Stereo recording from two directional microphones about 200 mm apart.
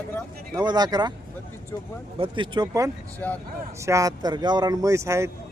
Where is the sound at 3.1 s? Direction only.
10° left (ahead or behind).